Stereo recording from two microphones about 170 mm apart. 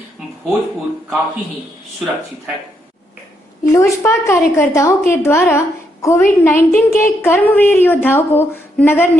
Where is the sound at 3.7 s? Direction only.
15° left (ahead or behind).